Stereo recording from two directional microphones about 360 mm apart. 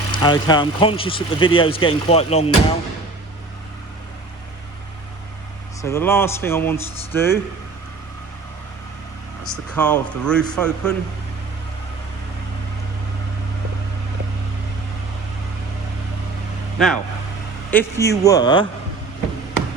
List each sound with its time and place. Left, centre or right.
0.1 s speech: centre
5.8 s speech: centre
9.4 s a man's voice: centre
16.7 s speech: centre